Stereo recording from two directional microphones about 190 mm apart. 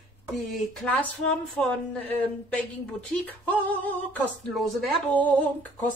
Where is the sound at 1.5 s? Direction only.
5° left (ahead or behind).